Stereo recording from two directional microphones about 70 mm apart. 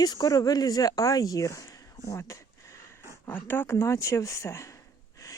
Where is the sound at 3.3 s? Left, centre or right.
Left.